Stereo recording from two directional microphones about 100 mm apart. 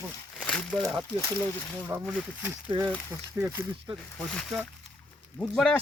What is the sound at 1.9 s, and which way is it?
Speech, 20° right (ahead or behind).